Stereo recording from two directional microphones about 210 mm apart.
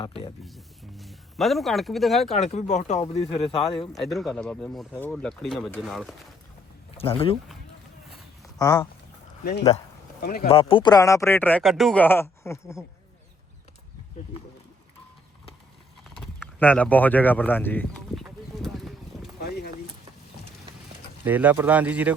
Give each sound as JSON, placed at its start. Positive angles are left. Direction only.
{"t": 0.4, "sound": "speech", "side_deg": 0}
{"t": 2.3, "sound": "speech", "side_deg": 35}
{"t": 3.9, "sound": "speech", "side_deg": 0}
{"t": 6.9, "sound": "speech", "side_deg": 25}
{"t": 8.5, "sound": "speech", "side_deg": 20}
{"t": 9.4, "sound": "speech", "side_deg": 50}
{"t": 10.5, "sound": "speech", "side_deg": 25}
{"t": 16.1, "sound": "horse", "side_deg": 5}
{"t": 19.4, "sound": "boat", "side_deg": 50}
{"t": 21.2, "sound": "speech", "side_deg": -10}